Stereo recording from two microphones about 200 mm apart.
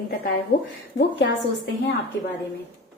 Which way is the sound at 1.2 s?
55° left (ahead or behind).